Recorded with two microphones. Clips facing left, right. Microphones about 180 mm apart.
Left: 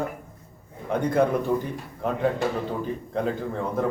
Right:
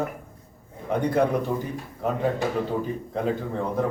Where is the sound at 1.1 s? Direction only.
Centre (ahead or behind).